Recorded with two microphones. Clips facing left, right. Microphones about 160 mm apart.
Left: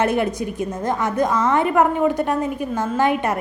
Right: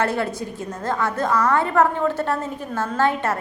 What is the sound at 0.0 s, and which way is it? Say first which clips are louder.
A woman's voice: left 3 dB; 20° left (ahead or behind).